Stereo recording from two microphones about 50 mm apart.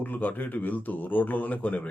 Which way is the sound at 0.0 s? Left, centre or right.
Left.